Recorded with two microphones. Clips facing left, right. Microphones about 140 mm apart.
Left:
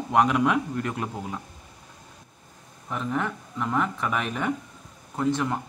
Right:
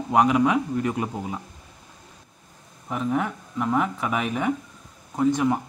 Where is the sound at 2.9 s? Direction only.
10° right (ahead or behind).